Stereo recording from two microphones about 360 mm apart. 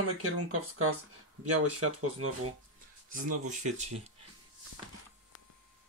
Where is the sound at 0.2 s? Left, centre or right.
Right.